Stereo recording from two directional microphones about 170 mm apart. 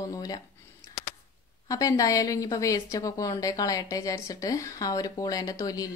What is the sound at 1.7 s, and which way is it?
A woman's voice, 20° left (ahead or behind).